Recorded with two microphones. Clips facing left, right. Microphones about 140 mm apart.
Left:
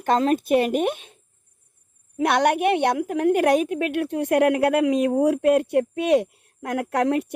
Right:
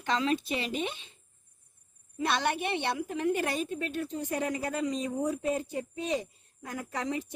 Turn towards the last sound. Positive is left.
turn(degrees=70)  # may be behind; listen again after turning